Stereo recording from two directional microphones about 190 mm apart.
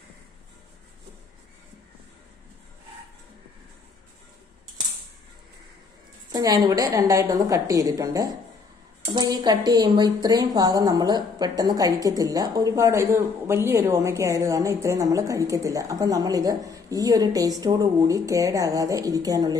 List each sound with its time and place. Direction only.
6.3 s speech: 20° right (ahead or behind)